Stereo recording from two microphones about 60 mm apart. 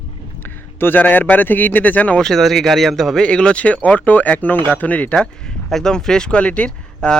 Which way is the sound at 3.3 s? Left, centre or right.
Centre.